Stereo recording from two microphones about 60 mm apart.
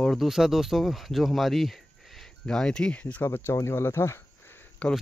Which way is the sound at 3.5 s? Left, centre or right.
Left.